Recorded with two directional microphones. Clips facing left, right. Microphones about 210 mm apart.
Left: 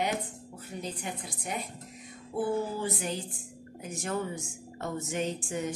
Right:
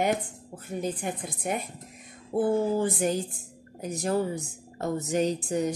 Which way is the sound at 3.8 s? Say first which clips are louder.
Right 6 dB; 35° right (ahead or behind).